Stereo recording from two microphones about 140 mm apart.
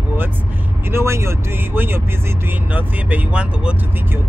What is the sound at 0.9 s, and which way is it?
Speech, 20° right (ahead or behind).